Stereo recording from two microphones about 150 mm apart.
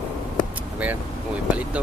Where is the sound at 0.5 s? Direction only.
10° right (ahead or behind).